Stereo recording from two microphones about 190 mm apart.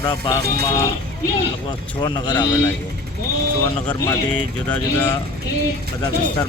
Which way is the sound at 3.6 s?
15° left (ahead or behind).